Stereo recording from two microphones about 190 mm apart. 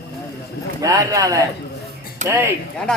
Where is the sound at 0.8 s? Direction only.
15° right (ahead or behind).